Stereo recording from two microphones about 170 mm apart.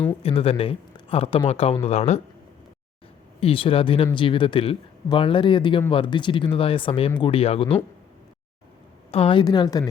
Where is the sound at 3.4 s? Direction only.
30° left (ahead or behind).